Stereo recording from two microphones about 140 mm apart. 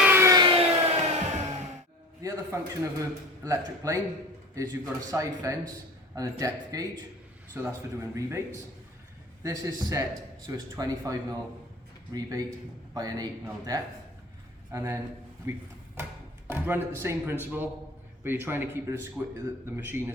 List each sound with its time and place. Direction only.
0.0 s a sound: 15° right (ahead or behind)
0.3 s music: 40° right (ahead or behind)
2.2 s a man's voice: 20° right (ahead or behind)
14.7 s a man's voice: 20° right (ahead or behind)
16.5 s speech: 15° right (ahead or behind)